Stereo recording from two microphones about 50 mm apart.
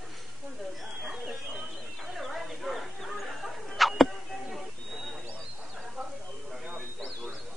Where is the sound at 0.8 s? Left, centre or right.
Centre.